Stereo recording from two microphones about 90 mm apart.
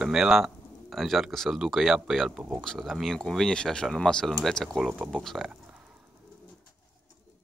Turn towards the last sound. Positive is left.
turn(degrees=5)  # may be behind; listen again after turning